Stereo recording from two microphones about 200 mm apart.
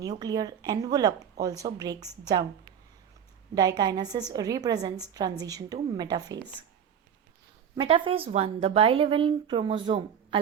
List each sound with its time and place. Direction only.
0.2 s a woman's voice: 20° right (ahead or behind)
3.5 s a woman's voice: 20° right (ahead or behind)
7.8 s a woman's voice: 25° right (ahead or behind)